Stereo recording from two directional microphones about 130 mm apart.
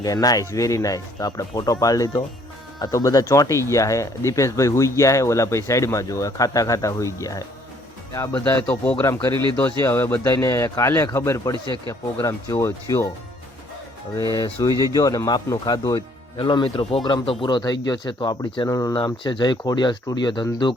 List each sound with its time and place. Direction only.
0.0 s speech: 30° left (ahead or behind)
8.3 s speech: 10° left (ahead or behind)
9.0 s speech: 25° left (ahead or behind)
9.3 s speech: 35° right (ahead or behind)
9.8 s speech: 15° left (ahead or behind)
11.5 s speech: 40° right (ahead or behind)
12.2 s speech: 25° left (ahead or behind)
14.2 s speech: 30° left (ahead or behind)